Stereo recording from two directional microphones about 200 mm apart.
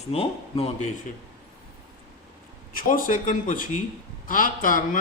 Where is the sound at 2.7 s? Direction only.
45° left (ahead or behind).